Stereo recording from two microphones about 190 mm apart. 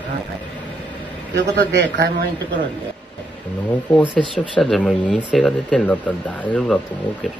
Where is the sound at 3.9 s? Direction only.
10° left (ahead or behind).